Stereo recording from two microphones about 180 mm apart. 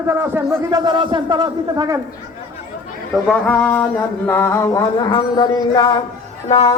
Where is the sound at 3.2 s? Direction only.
5° left (ahead or behind).